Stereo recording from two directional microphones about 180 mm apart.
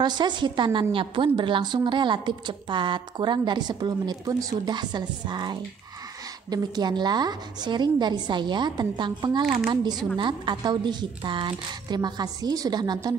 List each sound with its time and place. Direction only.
0.0 s a woman's voice: 25° right (ahead or behind)